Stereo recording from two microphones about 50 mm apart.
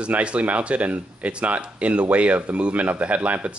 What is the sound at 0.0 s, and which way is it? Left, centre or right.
Speech, right.